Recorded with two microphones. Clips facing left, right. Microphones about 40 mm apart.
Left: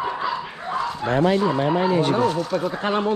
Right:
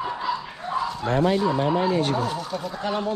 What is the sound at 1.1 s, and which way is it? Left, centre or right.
Speech, left.